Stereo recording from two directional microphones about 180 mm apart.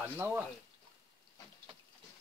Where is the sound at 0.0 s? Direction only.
10° right (ahead or behind).